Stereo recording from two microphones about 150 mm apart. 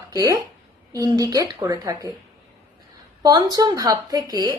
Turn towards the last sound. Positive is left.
turn(degrees=-25)  # may be behind; listen again after turning